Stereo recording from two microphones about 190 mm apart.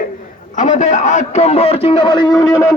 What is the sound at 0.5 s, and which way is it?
A man's voice, 40° left (ahead or behind).